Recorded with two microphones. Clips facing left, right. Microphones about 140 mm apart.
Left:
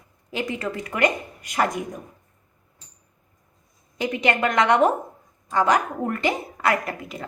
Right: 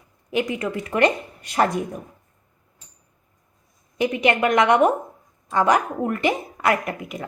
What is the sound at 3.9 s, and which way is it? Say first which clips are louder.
A woman's voice: right 3 dB; 20° right (ahead or behind).